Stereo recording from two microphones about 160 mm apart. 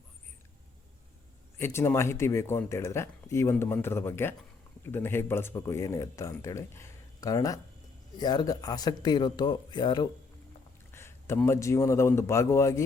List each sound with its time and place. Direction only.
1.5 s speech: 15° left (ahead or behind)
10.9 s a sound: 15° left (ahead or behind)
11.3 s speech: 15° left (ahead or behind)